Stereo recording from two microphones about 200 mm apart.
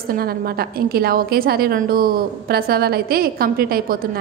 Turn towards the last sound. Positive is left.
turn(degrees=-45)  # may be behind; listen again after turning